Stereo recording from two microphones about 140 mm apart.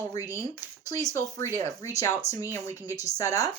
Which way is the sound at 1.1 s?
20° left (ahead or behind).